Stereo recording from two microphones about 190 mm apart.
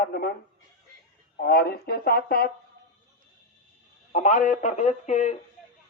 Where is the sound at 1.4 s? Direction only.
55° left (ahead or behind).